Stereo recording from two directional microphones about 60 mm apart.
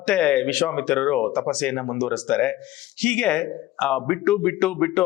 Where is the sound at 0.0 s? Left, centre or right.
Centre.